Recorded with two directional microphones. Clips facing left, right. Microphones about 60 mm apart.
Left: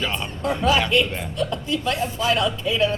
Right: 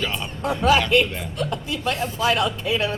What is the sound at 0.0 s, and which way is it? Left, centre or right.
Music, centre.